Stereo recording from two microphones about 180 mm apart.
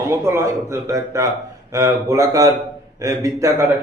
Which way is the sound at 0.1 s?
15° right (ahead or behind).